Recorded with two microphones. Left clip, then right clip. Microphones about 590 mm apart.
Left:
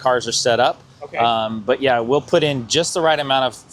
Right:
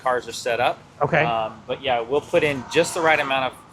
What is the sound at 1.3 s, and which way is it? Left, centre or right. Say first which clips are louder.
Speech: left 6 dB; left.